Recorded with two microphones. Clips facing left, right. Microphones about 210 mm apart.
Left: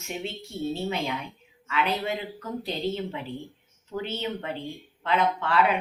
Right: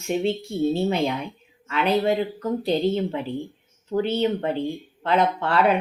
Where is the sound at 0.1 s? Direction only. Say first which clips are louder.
Right 11 dB; 30° right (ahead or behind).